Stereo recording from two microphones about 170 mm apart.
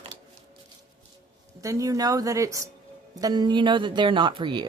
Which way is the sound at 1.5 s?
20° right (ahead or behind).